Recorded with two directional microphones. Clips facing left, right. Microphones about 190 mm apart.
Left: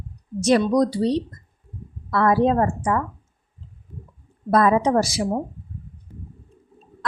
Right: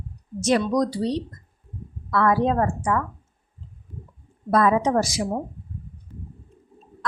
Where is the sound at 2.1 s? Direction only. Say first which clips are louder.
Left 2 dB; 35° left (ahead or behind).